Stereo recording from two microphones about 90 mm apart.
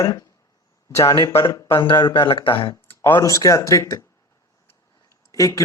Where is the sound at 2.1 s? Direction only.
75° left (ahead or behind).